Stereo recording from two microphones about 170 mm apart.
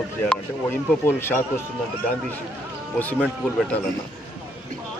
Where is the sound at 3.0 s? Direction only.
10° left (ahead or behind).